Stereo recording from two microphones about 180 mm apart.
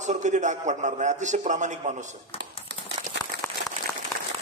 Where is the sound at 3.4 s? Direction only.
15° left (ahead or behind).